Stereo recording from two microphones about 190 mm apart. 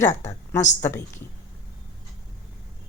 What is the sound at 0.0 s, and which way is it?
Speech, 40° left (ahead or behind).